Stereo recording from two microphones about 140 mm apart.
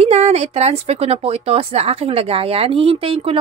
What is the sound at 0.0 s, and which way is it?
Speech, 50° right (ahead or behind).